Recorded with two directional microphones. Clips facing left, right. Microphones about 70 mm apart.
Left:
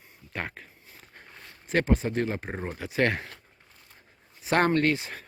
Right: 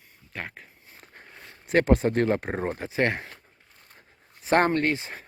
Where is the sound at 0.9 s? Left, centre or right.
Right.